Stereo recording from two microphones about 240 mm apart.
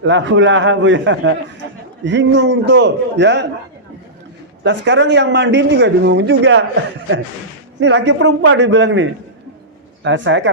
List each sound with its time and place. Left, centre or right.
0.0 s speech: right
4.9 s speech: right
7.8 s speech: right